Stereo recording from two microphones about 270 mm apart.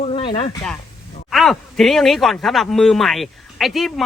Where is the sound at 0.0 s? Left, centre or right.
Centre.